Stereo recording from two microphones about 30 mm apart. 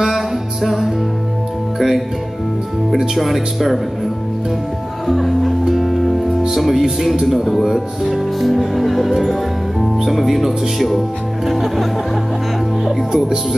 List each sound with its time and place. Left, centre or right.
0.1 s music: centre
3.2 s speech: centre
5.0 s music: centre
6.5 s speech: centre
7.6 s music: centre
8.1 s speech: centre